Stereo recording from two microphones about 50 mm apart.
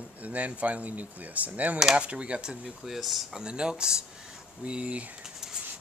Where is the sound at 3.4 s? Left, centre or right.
Centre.